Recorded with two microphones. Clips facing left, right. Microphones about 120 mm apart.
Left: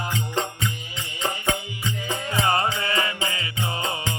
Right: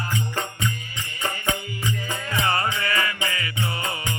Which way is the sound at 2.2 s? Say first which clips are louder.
Left 2 dB; 20° left (ahead or behind).